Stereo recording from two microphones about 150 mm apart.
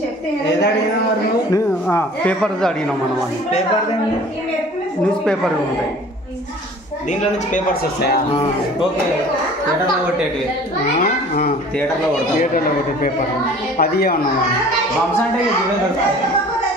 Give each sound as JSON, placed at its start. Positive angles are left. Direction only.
{"t": 1.5, "sound": "a woman's voice", "side_deg": 15}
{"t": 5.2, "sound": "speech", "side_deg": 5}
{"t": 11.0, "sound": "a child's voice", "side_deg": 80}
{"t": 13.7, "sound": "speech", "side_deg": 90}